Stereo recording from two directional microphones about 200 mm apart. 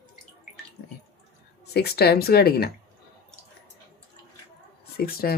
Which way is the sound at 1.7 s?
55° left (ahead or behind).